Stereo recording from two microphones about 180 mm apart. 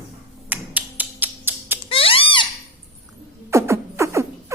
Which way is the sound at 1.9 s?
30° left (ahead or behind).